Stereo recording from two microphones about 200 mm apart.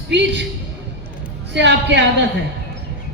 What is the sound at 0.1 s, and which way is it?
Speech, 60° right (ahead or behind).